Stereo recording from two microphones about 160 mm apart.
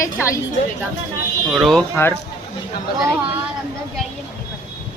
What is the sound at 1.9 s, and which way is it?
Speech, 15° left (ahead or behind).